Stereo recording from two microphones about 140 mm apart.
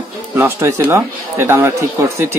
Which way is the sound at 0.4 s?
20° right (ahead or behind).